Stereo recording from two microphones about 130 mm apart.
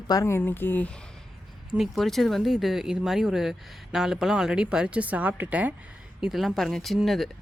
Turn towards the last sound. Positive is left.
turn(degrees=0)  # may be behind; listen again after turning